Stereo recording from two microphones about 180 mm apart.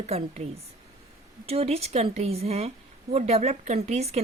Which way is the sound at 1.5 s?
35° right (ahead or behind).